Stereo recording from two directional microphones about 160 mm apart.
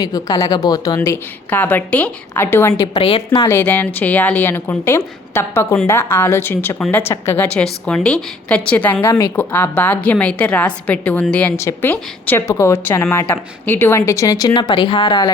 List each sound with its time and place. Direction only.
0.0 s a woman's voice: 25° left (ahead or behind)
3.3 s a woman's voice: 20° left (ahead or behind)
3.6 s a woman's voice: 10° left (ahead or behind); by 15.3 s 30° left (ahead or behind)